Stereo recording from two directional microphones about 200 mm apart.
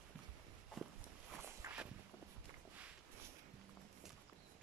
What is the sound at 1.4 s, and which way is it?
Walk, 10° right (ahead or behind).